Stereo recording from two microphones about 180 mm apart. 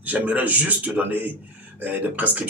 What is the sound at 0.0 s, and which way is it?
Speech, 10° right (ahead or behind).